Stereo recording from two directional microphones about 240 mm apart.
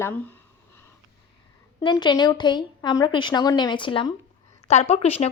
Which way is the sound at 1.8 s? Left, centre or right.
Centre.